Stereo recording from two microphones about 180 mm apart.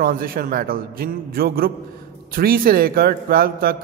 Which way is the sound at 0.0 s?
55° right (ahead or behind).